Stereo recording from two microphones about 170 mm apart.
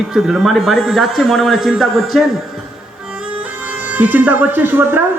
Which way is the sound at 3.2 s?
10° right (ahead or behind).